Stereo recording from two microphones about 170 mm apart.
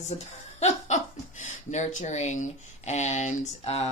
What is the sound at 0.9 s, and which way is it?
Laughter, 40° left (ahead or behind).